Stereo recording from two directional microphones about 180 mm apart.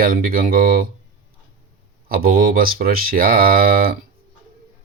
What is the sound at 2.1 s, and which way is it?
Speech, 55° right (ahead or behind).